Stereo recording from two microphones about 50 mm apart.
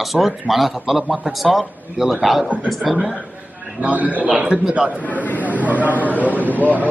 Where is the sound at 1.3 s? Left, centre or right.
Centre.